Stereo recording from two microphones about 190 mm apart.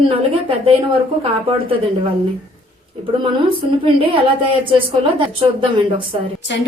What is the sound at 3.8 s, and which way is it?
A woman's voice, 30° right (ahead or behind).